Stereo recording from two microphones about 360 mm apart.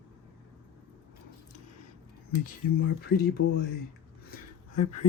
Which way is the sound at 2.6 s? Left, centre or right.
Left.